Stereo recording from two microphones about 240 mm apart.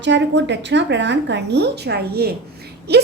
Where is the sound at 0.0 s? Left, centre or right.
Right.